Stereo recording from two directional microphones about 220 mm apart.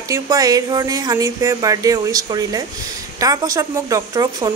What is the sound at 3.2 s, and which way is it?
Speech, 15° right (ahead or behind).